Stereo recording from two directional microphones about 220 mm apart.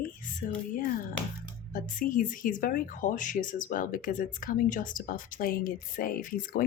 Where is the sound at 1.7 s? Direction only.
40° left (ahead or behind).